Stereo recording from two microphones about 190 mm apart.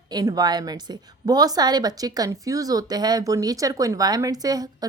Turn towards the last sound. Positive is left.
turn(degrees=-20)  # may be behind; listen again after turning